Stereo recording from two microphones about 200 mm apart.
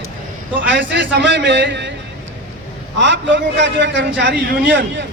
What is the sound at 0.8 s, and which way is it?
A man's voice, 60° right (ahead or behind).